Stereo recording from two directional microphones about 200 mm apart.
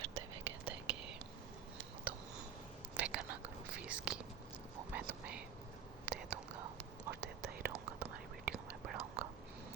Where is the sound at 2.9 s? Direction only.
5° right (ahead or behind).